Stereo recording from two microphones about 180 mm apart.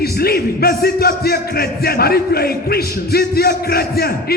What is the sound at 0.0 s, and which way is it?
Music, 60° left (ahead or behind).